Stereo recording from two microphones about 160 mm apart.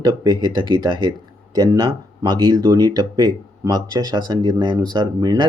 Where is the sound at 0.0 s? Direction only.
25° right (ahead or behind).